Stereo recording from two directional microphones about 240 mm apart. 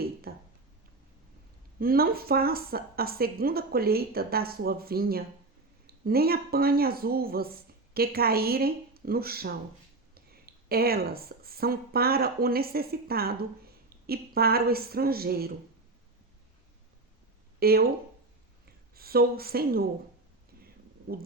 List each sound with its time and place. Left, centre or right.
0.0 s a sound: right
1.8 s a woman's voice: right
17.6 s speech: right
18.9 s a woman's voice: right